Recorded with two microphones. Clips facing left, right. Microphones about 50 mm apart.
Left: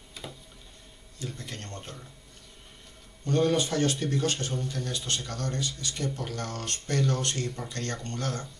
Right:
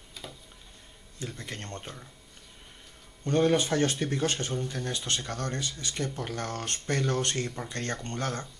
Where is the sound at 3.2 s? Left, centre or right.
Right.